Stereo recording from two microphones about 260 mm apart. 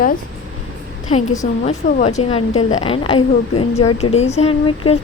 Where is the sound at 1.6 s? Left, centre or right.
Left.